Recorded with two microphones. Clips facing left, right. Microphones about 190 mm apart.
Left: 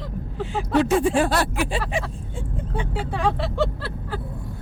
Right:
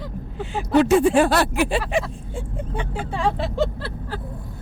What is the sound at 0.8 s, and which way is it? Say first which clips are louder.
Speech: right 4 dB; 70° right (ahead or behind).